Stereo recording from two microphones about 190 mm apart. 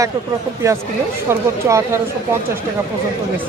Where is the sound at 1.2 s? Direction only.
15° right (ahead or behind).